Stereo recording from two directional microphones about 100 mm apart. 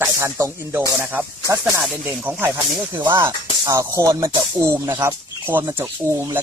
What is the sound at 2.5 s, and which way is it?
Speech, 45° right (ahead or behind).